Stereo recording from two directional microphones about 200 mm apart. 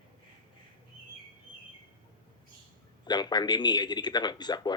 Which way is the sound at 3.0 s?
20° left (ahead or behind).